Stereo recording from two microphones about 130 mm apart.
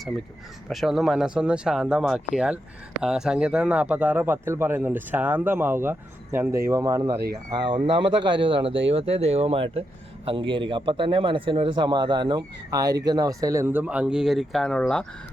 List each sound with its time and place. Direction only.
0.7 s speech: centre (ahead or behind)